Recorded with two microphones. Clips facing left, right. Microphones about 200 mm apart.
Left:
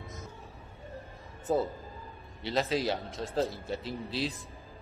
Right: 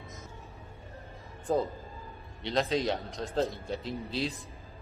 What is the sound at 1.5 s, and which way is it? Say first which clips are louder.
A man's voice: even; 5° left (ahead or behind).